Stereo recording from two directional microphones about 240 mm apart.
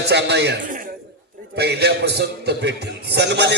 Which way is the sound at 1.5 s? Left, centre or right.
Right.